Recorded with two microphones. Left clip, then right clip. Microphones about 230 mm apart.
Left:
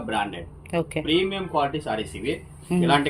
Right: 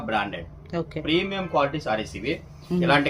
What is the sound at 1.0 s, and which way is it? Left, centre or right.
Speech, right.